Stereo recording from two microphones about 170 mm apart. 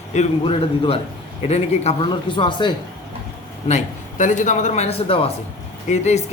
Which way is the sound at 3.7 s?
45° left (ahead or behind).